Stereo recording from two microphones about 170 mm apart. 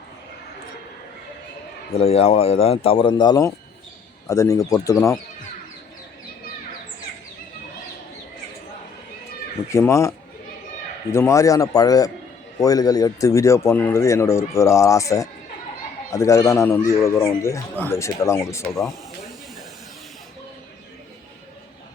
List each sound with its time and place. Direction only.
1.9 s a man's voice: 35° left (ahead or behind); by 5.2 s 20° left (ahead or behind)
9.7 s a man's voice: 15° left (ahead or behind)